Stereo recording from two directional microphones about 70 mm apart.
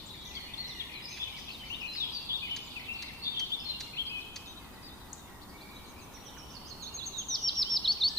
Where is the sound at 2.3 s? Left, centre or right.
Right.